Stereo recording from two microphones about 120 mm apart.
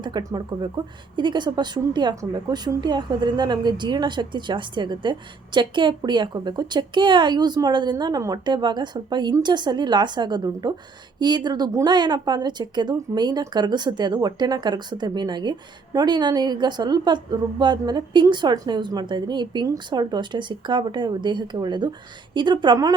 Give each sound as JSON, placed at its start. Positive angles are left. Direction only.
{"t": 0.0, "sound": "a woman's voice", "side_deg": -35}